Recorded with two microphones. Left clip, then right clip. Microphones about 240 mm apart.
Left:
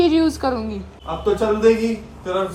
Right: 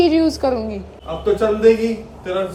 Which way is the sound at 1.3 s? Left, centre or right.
Left.